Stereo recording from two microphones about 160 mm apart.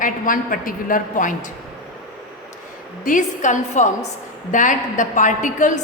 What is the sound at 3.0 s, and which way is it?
A woman's voice, 55° left (ahead or behind).